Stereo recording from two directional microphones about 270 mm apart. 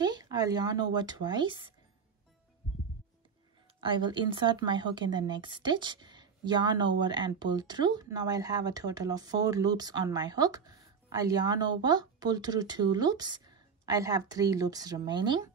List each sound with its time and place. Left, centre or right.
0.0 s a woman's voice: centre
3.8 s a woman's voice: centre